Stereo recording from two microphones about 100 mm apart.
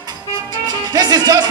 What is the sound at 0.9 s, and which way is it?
Speech, 40° right (ahead or behind).